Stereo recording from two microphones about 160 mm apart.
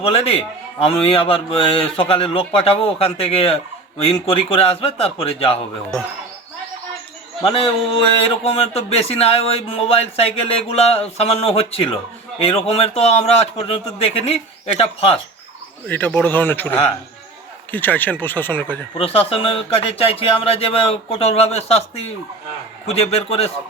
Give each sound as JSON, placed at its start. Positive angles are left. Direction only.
{"t": 0.0, "sound": "speech", "side_deg": 40}
{"t": 7.4, "sound": "speech", "side_deg": 35}
{"t": 15.9, "sound": "speech", "side_deg": 10}
{"t": 18.9, "sound": "speech", "side_deg": 35}